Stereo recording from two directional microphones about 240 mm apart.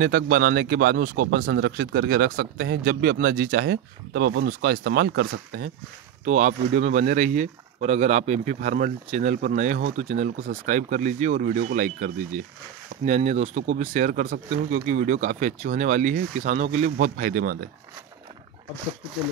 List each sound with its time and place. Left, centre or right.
0.0 s speech: right